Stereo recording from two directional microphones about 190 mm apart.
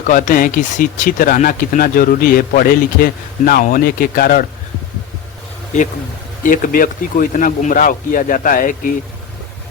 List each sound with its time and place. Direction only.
0.1 s speech: 45° left (ahead or behind)
6.4 s speech: 45° left (ahead or behind)